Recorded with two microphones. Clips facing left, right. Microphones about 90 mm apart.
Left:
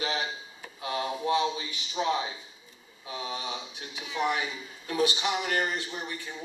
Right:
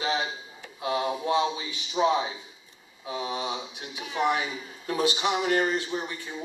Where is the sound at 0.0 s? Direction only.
20° right (ahead or behind).